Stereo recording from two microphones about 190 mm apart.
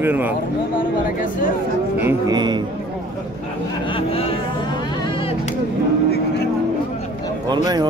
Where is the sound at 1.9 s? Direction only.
15° right (ahead or behind).